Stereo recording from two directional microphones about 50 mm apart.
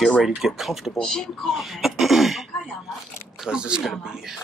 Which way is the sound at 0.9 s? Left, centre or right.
Centre.